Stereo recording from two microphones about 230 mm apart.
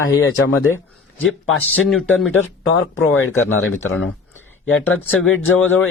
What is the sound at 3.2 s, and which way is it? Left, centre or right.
Speech, left.